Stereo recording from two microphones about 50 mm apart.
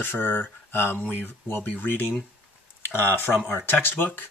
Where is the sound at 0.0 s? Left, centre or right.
Left.